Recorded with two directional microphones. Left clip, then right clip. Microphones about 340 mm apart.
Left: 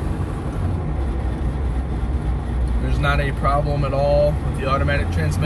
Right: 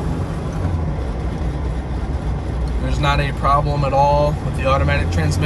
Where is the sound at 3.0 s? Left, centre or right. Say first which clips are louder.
Right 3 dB; centre.